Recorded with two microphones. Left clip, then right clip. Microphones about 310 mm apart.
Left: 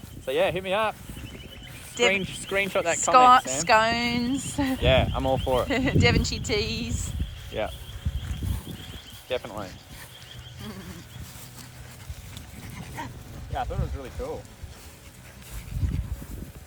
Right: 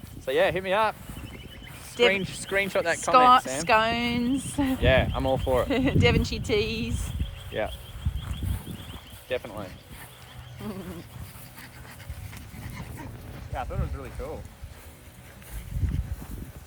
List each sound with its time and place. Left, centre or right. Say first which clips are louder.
0.3 s speech: right 1 dB; centre
2.0 s speech: right 1 dB; centre
9.3 s speech: left 1 dB; centre
10.6 s goat: right 4 dB; centre
13.5 s speech: left 3 dB; left